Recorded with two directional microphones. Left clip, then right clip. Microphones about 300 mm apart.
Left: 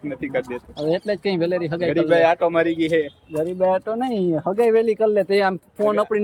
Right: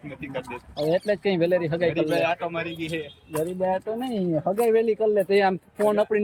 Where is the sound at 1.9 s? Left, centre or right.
Centre.